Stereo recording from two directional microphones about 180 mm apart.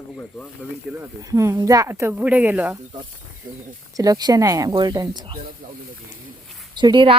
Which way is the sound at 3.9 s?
20° right (ahead or behind).